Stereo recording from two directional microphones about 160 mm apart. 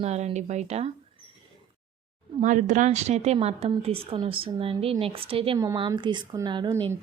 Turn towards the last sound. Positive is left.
turn(degrees=-25)  # may be behind; listen again after turning